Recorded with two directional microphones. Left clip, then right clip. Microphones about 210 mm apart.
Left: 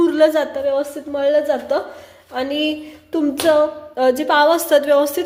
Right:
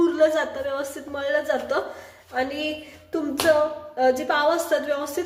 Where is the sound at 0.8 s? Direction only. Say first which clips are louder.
Left 9 dB; 25° left (ahead or behind).